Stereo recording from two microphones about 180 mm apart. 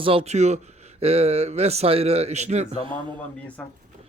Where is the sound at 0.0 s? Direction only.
30° right (ahead or behind).